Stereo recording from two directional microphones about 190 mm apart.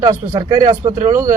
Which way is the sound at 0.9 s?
40° right (ahead or behind).